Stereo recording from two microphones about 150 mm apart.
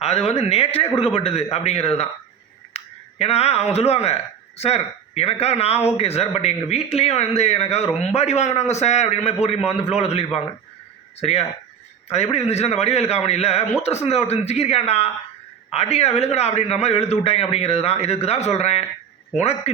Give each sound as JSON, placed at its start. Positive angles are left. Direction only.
{"t": 0.0, "sound": "a man's voice", "side_deg": 45}